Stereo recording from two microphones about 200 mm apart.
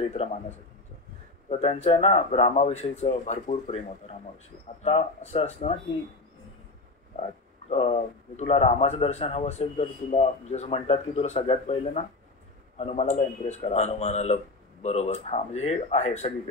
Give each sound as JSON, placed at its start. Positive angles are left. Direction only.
{"t": 0.1, "sound": "a man's voice", "side_deg": 30}
{"t": 1.5, "sound": "a man's voice", "side_deg": 35}
{"t": 7.7, "sound": "a man's voice", "side_deg": 30}